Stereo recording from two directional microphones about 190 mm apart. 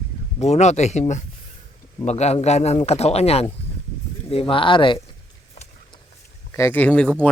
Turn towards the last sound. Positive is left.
turn(degrees=5)  # may be behind; listen again after turning